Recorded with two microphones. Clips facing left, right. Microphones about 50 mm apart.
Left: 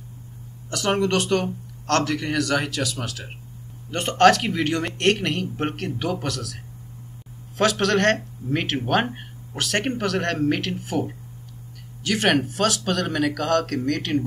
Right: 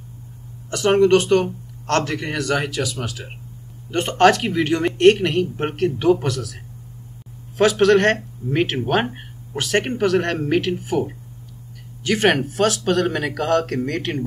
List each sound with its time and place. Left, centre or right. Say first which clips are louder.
0.7 s a man's voice: right 7 dB; right
4.4 s a man's voice: right 4 dB; centre
9.1 s a sound: right 3 dB; centre
9.6 s a man's voice: right 4 dB; centre